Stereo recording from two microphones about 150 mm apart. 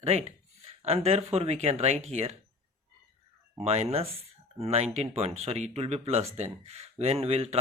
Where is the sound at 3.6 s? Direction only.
45° right (ahead or behind).